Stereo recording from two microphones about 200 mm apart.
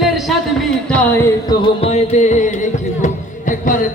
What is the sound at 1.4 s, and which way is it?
Music, 25° left (ahead or behind).